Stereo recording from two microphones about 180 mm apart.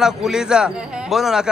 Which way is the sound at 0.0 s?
5° right (ahead or behind).